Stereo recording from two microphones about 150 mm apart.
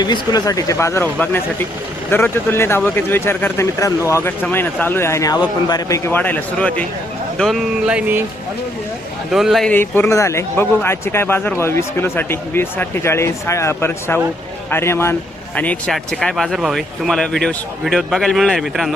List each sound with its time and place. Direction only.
0.0 s speech: 30° left (ahead or behind)
6.1 s speech: 10° left (ahead or behind); by 8.2 s 10° right (ahead or behind)
9.3 s speech: centre (ahead or behind)
9.7 s speech: 15° left (ahead or behind)